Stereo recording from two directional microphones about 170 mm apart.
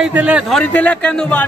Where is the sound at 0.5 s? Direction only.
10° left (ahead or behind).